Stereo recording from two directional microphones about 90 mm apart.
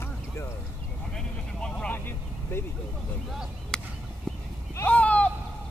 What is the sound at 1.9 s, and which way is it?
Vehicle, 25° left (ahead or behind).